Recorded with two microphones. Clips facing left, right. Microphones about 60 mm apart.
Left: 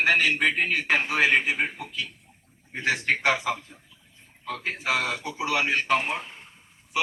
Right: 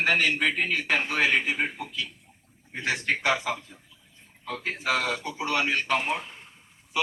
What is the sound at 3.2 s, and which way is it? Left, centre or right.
Speech, left.